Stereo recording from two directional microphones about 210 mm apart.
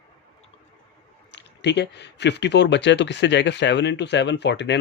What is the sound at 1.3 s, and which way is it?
Speech, 55° left (ahead or behind).